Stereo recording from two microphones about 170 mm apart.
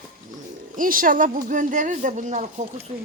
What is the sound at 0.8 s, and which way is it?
Speech, 55° right (ahead or behind).